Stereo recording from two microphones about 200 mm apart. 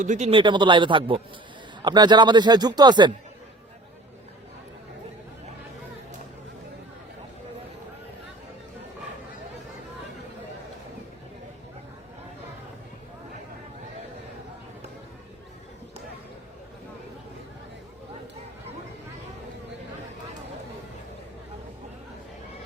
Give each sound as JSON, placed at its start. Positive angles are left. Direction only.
{"t": 0.0, "sound": "speech", "side_deg": -35}